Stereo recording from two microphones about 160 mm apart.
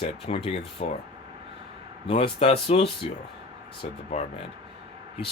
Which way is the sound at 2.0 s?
40° left (ahead or behind).